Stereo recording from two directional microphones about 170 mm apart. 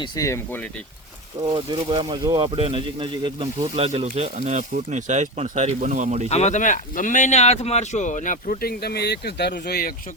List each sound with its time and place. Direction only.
0.0 s speech: 20° left (ahead or behind)
1.5 s speech: 30° right (ahead or behind)
4.4 s speech: 45° right (ahead or behind)
6.2 s speech: 40° left (ahead or behind); by 9.9 s 65° left (ahead or behind)